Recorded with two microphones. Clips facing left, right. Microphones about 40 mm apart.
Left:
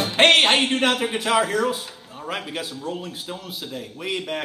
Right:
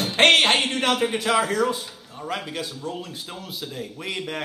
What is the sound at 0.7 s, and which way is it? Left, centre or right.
Speech, centre.